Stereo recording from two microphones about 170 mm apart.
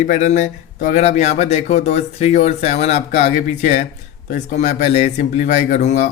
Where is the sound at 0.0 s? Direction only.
45° left (ahead or behind).